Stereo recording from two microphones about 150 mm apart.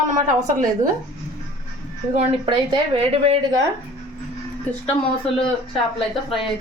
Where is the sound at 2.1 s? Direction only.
40° right (ahead or behind).